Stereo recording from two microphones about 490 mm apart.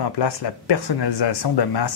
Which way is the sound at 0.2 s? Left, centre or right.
Left.